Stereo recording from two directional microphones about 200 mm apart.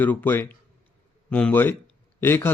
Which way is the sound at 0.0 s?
10° left (ahead or behind).